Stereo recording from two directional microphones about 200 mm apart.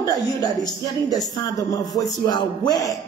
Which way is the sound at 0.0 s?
20° left (ahead or behind).